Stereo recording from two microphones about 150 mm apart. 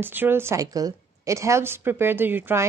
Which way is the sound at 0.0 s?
15° right (ahead or behind).